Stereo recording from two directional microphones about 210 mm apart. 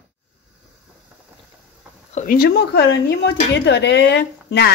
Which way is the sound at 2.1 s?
40° left (ahead or behind).